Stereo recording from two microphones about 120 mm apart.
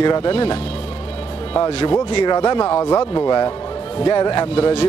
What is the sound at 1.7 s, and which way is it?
Speech, 55° left (ahead or behind).